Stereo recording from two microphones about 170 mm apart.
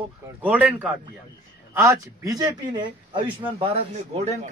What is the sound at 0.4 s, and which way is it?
Speech, 10° right (ahead or behind).